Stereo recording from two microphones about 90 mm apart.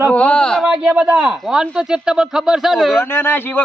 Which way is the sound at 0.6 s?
15° right (ahead or behind).